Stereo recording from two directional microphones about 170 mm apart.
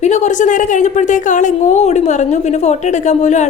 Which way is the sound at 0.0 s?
45° left (ahead or behind).